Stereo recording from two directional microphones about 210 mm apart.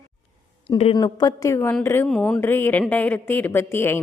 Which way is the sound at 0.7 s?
25° left (ahead or behind).